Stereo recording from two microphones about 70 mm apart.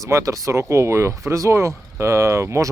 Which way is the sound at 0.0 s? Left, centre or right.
Right.